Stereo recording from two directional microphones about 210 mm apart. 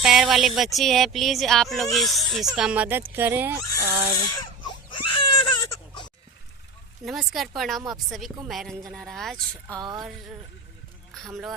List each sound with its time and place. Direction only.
0.0 s speech: centre (ahead or behind)
4.9 s baby cry: 25° left (ahead or behind)
7.0 s speech: centre (ahead or behind)
9.7 s speech: 20° right (ahead or behind)
11.1 s speech: centre (ahead or behind)